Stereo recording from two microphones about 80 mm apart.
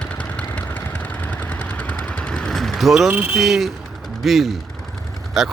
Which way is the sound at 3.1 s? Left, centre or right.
Right.